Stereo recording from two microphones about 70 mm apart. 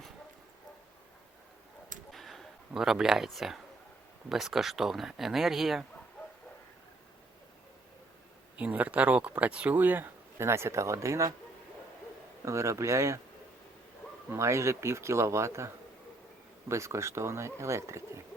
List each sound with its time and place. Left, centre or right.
2.1 s a sound: centre
3.2 s speech: centre
8.5 s speech: right
10.3 s speech: right
12.5 s speech: right
14.3 s speech: right